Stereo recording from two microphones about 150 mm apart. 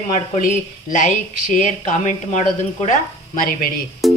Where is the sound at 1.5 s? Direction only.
55° left (ahead or behind).